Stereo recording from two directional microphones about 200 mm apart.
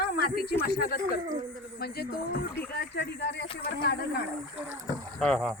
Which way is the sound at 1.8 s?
50° left (ahead or behind).